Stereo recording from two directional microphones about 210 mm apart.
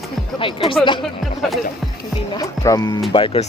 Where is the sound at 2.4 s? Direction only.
15° left (ahead or behind).